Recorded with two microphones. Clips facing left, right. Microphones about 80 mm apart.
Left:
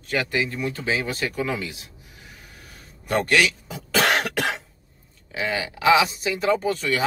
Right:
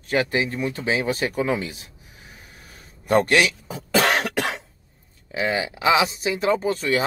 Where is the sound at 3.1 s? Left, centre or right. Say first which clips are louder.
Right 3 dB; right.